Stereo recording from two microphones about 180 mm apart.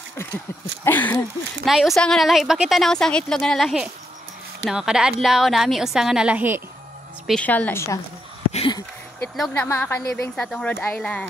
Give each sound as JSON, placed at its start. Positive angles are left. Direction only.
{"t": 0.8, "sound": "a woman's voice", "side_deg": 10}
{"t": 7.2, "sound": "a woman's voice", "side_deg": 5}
{"t": 8.5, "sound": "a sound", "side_deg": 35}
{"t": 9.4, "sound": "a woman's voice", "side_deg": 10}